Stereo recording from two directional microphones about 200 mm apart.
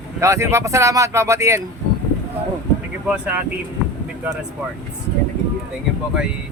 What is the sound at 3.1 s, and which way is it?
Speech, 10° right (ahead or behind).